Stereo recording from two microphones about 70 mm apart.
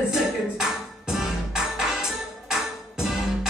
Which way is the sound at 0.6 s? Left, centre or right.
Centre.